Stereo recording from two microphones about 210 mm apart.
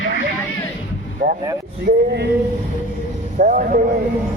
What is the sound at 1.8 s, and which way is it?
Speech, 50° right (ahead or behind).